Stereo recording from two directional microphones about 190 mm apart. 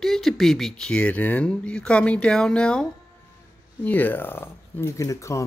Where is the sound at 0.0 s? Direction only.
Centre (ahead or behind).